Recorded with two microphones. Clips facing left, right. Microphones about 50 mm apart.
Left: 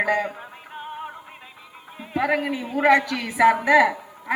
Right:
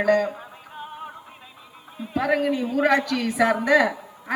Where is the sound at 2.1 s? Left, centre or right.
Centre.